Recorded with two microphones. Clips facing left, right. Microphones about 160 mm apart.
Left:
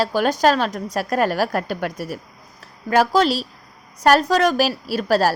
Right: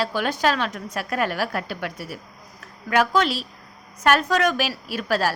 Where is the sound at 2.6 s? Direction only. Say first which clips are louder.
Left 3 dB; 35° left (ahead or behind).